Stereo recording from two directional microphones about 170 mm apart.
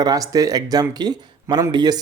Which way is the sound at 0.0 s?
20° right (ahead or behind).